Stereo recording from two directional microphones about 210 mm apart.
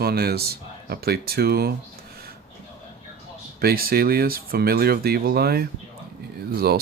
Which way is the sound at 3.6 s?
45° right (ahead or behind).